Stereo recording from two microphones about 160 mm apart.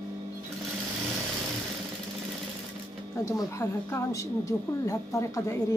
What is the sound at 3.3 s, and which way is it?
A woman's voice, 20° left (ahead or behind).